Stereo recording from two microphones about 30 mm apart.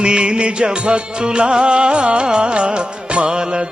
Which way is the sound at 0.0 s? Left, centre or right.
Right.